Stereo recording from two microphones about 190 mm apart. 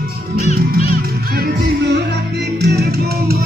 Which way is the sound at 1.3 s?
60° right (ahead or behind).